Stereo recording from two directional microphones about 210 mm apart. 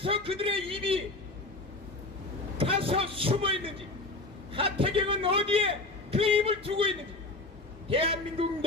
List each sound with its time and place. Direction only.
0.0 s a sound: 25° right (ahead or behind)
2.5 s vehicle: 25° right (ahead or behind)
4.6 s a man's voice: 25° right (ahead or behind)